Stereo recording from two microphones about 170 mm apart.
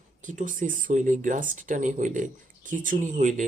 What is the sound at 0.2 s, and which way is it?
Speech, 50° right (ahead or behind).